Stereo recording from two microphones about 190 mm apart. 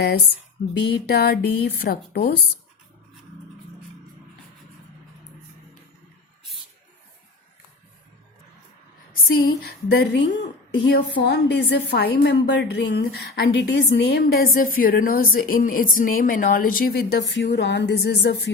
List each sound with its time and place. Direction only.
0.7 s a woman's voice: 60° left (ahead or behind)
9.3 s a woman's voice: 55° left (ahead or behind)